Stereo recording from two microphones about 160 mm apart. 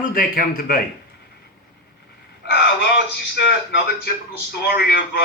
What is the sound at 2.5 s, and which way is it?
A man's voice, 90° left.